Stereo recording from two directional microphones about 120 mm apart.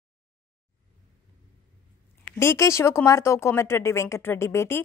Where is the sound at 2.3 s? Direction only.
25° left (ahead or behind).